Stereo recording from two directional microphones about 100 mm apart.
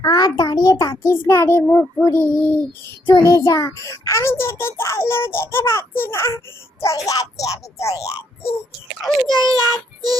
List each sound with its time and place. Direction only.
0.0 s a child's voice: 40° left (ahead or behind)
9.4 s child singing: 40° right (ahead or behind)